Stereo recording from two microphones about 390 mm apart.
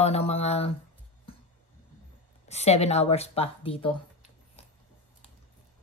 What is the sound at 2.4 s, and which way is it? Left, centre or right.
Speech, centre.